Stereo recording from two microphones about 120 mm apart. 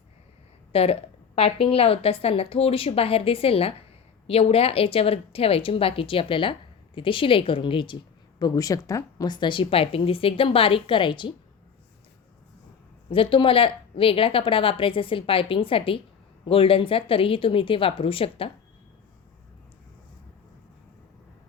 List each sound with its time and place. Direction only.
0.7 s a woman's voice: 55° left (ahead or behind)
8.4 s speech: 30° left (ahead or behind)
13.1 s speech: 45° left (ahead or behind)